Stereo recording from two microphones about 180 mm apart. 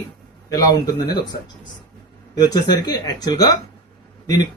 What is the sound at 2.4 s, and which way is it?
Speech, 25° left (ahead or behind).